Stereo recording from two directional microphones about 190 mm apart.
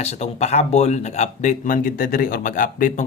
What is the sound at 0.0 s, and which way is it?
Speech, 35° left (ahead or behind).